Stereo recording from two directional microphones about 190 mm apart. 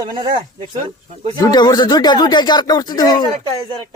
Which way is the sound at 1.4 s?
20° left (ahead or behind).